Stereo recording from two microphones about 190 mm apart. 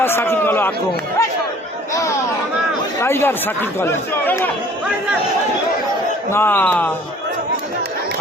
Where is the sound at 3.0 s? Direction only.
10° left (ahead or behind).